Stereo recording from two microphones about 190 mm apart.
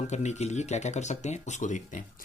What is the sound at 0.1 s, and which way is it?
Speech, 35° left (ahead or behind).